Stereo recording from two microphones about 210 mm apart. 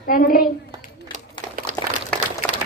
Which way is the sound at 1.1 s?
35° right (ahead or behind).